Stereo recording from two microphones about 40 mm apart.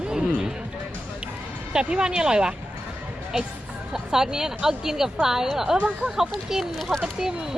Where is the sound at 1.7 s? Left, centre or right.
Right.